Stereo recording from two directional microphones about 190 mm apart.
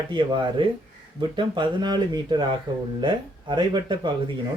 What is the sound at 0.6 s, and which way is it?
Speech, 25° right (ahead or behind).